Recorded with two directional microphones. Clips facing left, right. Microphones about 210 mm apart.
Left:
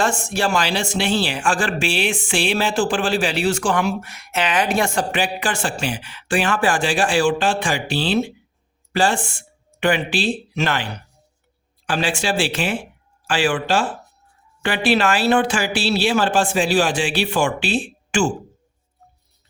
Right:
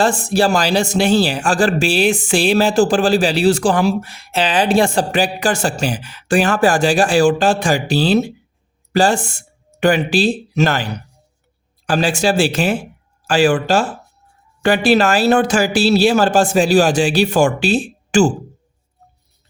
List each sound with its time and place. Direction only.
0.0 s speech: 35° right (ahead or behind)